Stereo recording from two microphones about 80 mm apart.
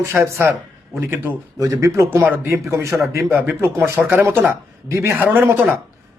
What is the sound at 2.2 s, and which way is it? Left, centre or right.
Speech, right.